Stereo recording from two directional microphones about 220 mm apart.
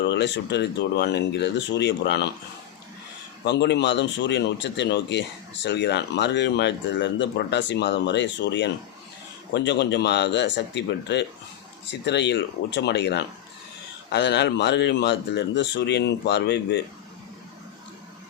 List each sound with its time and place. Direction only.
0.1 s speech: 50° left (ahead or behind)
3.4 s speech: 50° left (ahead or behind)